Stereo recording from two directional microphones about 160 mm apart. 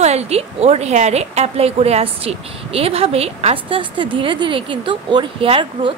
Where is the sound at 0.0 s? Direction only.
40° right (ahead or behind).